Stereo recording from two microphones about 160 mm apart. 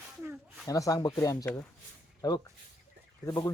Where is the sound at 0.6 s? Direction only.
20° left (ahead or behind).